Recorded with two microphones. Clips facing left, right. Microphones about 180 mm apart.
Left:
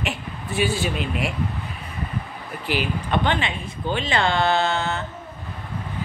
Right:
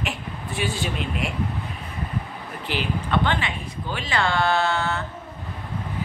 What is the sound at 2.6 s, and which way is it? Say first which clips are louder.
Speech: left 2 dB; 15° left (ahead or behind).